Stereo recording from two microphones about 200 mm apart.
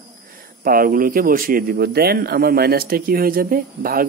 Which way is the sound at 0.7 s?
45° right (ahead or behind).